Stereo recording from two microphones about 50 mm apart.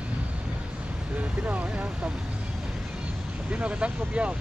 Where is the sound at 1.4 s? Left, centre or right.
Right.